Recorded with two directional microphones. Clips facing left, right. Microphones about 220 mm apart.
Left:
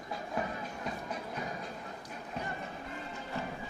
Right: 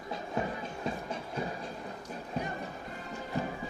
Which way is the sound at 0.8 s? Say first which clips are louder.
Right 3 dB; 25° right (ahead or behind).